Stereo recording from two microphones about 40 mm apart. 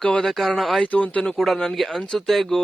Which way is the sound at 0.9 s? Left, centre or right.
Left.